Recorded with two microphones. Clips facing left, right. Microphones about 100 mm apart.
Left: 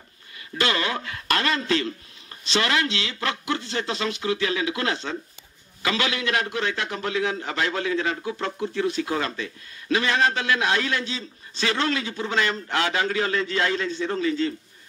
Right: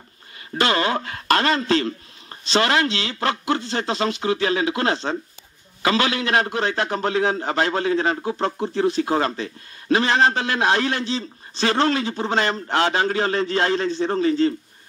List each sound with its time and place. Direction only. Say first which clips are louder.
0.6 s a man's voice: right 5 dB; 35° right (ahead or behind)